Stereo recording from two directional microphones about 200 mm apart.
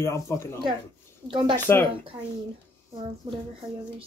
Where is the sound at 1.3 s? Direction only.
25° right (ahead or behind).